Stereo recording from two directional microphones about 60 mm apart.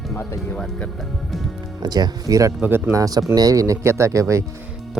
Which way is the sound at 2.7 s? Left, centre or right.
Right.